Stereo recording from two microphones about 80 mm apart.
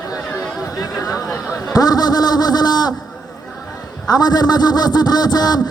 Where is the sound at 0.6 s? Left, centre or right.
Left.